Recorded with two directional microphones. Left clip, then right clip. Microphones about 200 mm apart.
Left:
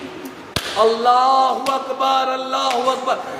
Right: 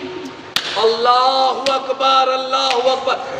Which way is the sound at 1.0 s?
15° left (ahead or behind).